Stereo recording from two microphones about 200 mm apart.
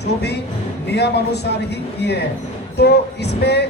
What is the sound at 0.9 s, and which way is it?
A woman's voice, 55° left (ahead or behind).